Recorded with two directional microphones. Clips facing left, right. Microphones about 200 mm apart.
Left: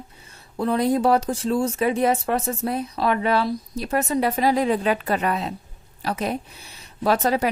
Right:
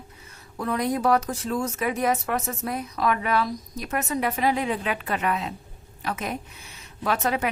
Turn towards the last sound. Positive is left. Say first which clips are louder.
# left 5 dB
turn(degrees=35)  # may be behind; listen again after turning